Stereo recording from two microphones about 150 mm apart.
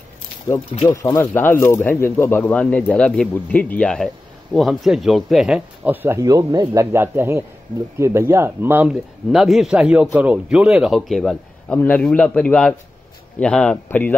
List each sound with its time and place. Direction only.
0.5 s speech: 20° left (ahead or behind); by 5.9 s 5° right (ahead or behind)
6.0 s speech: 20° right (ahead or behind)
9.3 s a man's voice: centre (ahead or behind)